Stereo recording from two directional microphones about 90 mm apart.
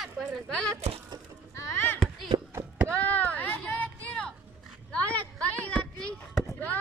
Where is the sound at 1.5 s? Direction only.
30° left (ahead or behind).